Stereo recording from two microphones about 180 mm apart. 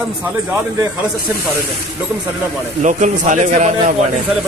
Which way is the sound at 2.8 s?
45° right (ahead or behind).